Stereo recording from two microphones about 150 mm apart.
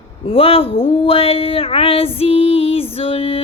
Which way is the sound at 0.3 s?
40° left (ahead or behind).